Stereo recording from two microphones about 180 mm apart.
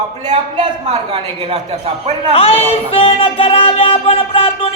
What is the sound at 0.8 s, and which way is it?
Speech, 35° right (ahead or behind).